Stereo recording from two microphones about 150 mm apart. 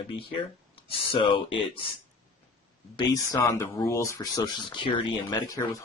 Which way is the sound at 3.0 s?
25° left (ahead or behind).